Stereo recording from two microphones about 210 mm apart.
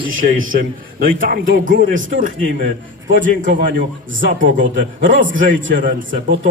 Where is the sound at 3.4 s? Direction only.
40° right (ahead or behind).